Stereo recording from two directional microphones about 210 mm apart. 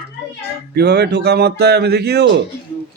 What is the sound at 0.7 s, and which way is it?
Speech, 50° right (ahead or behind).